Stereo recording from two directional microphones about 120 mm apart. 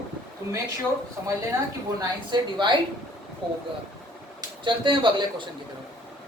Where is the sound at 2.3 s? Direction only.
40° right (ahead or behind).